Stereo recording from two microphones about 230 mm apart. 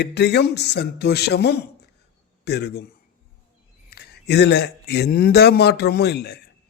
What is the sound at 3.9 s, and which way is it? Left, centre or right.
Speech, left.